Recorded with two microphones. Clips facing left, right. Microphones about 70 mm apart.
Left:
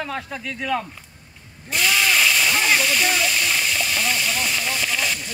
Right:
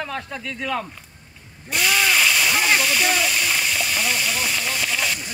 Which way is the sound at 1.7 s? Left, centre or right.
Centre.